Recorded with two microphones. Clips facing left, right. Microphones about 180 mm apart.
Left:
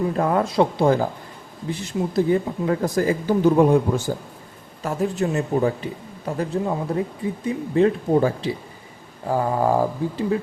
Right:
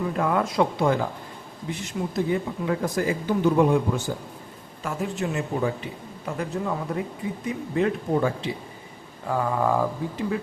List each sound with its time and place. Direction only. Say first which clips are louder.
0.2 s speech: left 3 dB; 35° left (ahead or behind)